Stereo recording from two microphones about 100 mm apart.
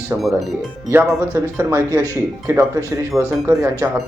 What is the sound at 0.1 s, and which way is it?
Speech, 25° right (ahead or behind).